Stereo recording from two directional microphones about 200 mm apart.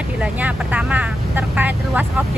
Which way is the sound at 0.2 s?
5° right (ahead or behind).